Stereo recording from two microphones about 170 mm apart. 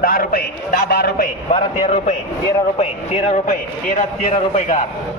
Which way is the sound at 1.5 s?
35° left (ahead or behind).